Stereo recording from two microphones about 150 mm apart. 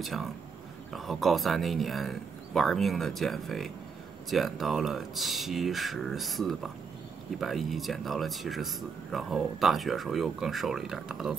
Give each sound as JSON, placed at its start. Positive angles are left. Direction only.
{"t": 0.0, "sound": "speech", "side_deg": 0}